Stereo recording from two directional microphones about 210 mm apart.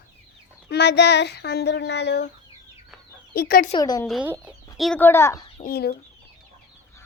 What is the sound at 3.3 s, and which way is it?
Speech, 45° left (ahead or behind).